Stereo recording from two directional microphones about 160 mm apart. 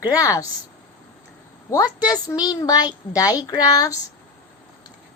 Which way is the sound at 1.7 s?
20° left (ahead or behind).